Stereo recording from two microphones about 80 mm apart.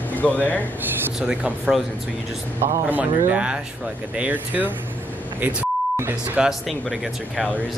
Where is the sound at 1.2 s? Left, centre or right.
Centre.